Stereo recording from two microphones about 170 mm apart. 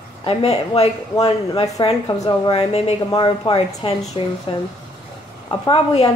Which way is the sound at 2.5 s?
35° left (ahead or behind).